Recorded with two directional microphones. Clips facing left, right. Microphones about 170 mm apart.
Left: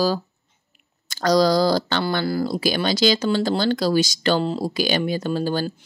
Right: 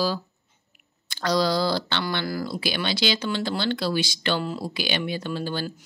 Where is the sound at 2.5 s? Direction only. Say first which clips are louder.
Left 6 dB; 40° left (ahead or behind).